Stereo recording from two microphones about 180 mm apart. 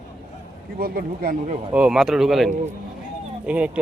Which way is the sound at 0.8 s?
55° right (ahead or behind).